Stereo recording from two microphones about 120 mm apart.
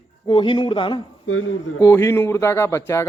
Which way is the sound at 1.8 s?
20° left (ahead or behind).